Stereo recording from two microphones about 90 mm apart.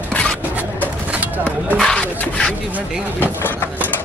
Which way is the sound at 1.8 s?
10° left (ahead or behind).